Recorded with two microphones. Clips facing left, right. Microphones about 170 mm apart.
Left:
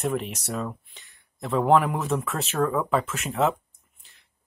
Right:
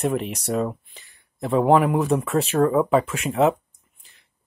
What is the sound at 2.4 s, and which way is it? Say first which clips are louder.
Speech: right 6 dB; 35° right (ahead or behind).